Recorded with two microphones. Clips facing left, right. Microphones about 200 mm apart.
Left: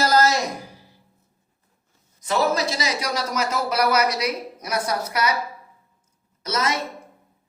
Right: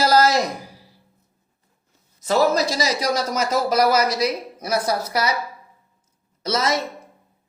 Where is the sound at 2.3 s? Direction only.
35° right (ahead or behind).